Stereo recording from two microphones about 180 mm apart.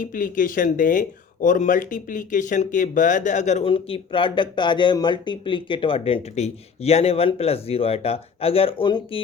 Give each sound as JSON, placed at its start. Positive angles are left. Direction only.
{"t": 0.0, "sound": "speech", "side_deg": 50}